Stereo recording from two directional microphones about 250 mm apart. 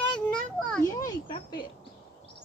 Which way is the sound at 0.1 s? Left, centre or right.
Centre.